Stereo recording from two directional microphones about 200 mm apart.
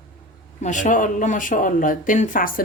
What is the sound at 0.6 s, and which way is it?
Speech, 40° left (ahead or behind).